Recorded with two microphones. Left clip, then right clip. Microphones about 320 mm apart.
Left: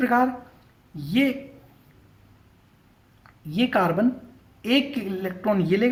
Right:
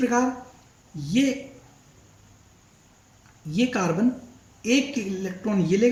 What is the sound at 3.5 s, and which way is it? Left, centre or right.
Speech, left.